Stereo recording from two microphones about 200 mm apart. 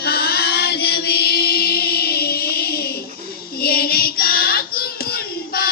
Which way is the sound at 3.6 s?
50° left (ahead or behind).